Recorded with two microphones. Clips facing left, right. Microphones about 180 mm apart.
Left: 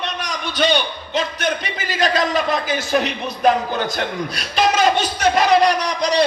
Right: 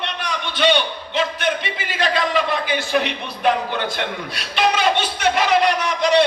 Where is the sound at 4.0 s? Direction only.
40° left (ahead or behind).